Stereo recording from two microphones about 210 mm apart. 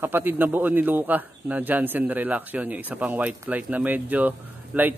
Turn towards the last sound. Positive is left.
turn(degrees=-10)  # may be behind; listen again after turning